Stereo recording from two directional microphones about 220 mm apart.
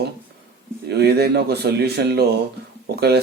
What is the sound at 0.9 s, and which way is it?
Speech, 50° right (ahead or behind).